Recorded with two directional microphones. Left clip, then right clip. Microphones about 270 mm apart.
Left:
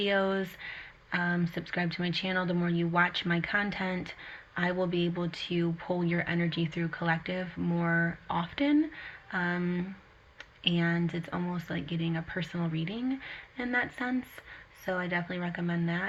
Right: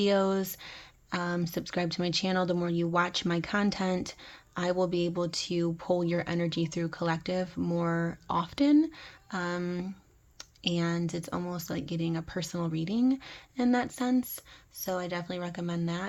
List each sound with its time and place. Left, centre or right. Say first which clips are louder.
0.0 s speech: right 2 dB; right